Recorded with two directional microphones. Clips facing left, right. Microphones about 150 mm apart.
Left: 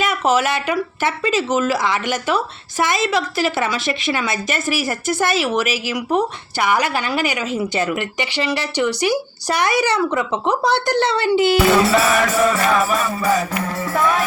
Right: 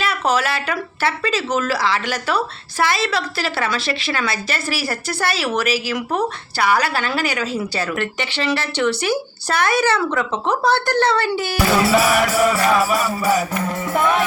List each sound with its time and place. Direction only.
0.0 s speech: 15° left (ahead or behind)
11.8 s music: 5° right (ahead or behind)
13.9 s music: 20° right (ahead or behind)